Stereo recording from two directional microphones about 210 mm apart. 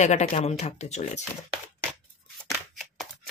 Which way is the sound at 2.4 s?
Centre (ahead or behind).